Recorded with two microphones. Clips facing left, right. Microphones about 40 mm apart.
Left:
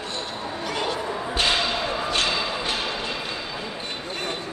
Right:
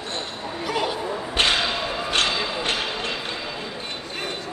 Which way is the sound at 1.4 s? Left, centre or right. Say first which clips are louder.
Right 2 dB; right.